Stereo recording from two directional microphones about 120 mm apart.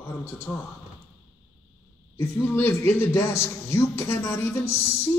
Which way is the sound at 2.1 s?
20° left (ahead or behind).